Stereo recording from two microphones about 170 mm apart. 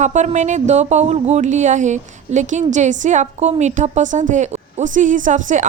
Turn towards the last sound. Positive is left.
turn(degrees=-50)  # may be behind; listen again after turning